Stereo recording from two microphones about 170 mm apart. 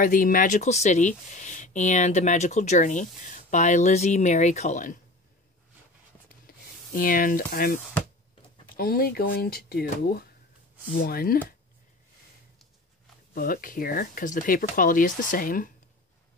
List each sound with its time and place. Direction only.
0.0 s speech: 55° left (ahead or behind)
6.2 s a sound: 60° left (ahead or behind)
8.7 s speech: 60° left (ahead or behind)
13.3 s speech: 60° left (ahead or behind)